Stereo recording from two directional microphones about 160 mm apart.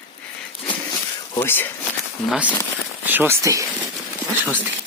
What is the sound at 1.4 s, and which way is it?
Speech, 15° left (ahead or behind).